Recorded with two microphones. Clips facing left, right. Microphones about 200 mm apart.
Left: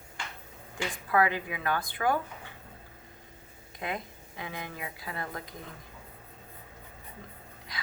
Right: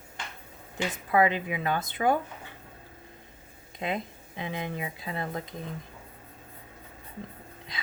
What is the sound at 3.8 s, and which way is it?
Speech, 25° right (ahead or behind).